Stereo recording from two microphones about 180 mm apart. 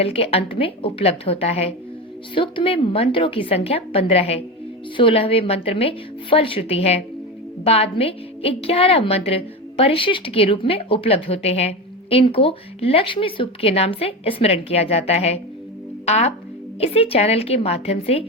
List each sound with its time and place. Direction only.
0.0 s a woman's voice: 35° left (ahead or behind)